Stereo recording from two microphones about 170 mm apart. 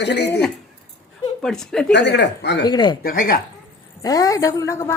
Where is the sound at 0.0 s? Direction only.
85° left.